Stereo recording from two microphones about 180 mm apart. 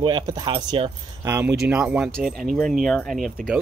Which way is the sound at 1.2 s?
10° right (ahead or behind).